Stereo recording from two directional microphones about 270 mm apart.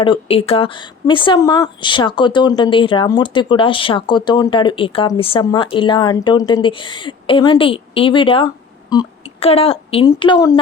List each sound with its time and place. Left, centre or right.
0.0 s a woman's voice: centre